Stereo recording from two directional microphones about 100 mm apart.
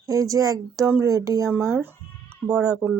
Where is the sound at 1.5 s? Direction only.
25° right (ahead or behind).